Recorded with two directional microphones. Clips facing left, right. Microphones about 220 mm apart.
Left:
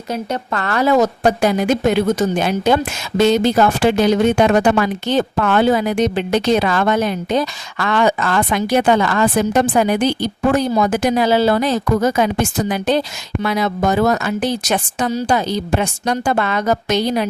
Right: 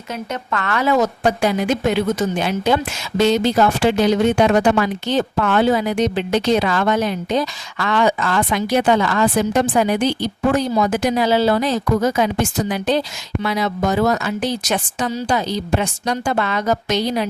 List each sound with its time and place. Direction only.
0.1 s a woman's voice: 35° left (ahead or behind); by 17.2 s 50° left (ahead or behind)